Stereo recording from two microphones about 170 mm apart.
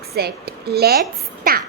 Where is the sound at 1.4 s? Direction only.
60° right (ahead or behind).